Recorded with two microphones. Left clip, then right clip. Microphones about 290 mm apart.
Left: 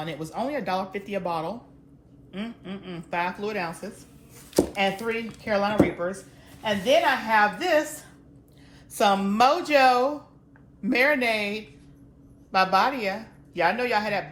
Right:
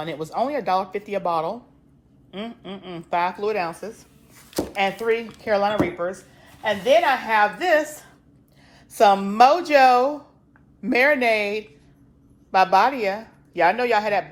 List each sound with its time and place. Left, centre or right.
0.0 s a woman's voice: right
8.9 s a woman's voice: right